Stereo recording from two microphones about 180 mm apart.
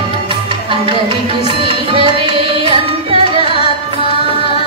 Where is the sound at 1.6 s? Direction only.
30° right (ahead or behind).